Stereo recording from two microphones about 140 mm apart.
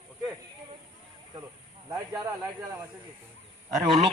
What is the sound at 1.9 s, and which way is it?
Speech, 20° right (ahead or behind).